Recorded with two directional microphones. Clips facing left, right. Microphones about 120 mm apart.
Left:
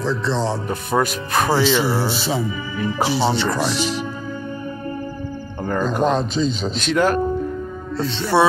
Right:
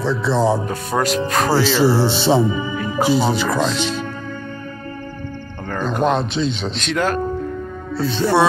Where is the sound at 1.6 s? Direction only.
35° right (ahead or behind); by 3.6 s 10° right (ahead or behind).